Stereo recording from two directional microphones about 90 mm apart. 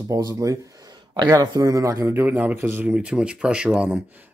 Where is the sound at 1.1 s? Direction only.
50° right (ahead or behind).